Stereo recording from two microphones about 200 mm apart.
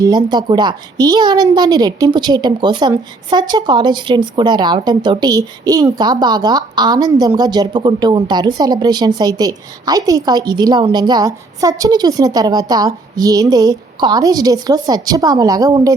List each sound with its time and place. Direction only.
0.0 s a woman's voice: 20° right (ahead or behind)